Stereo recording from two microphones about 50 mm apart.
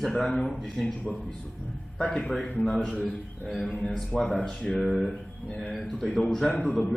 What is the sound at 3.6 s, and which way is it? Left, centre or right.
Speech, left.